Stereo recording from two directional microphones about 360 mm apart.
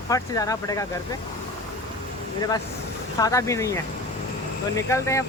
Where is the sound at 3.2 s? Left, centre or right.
Centre.